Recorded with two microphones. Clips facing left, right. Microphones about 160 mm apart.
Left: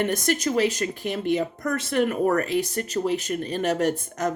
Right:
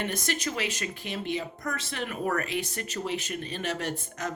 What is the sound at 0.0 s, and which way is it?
Speech, 45° left (ahead or behind).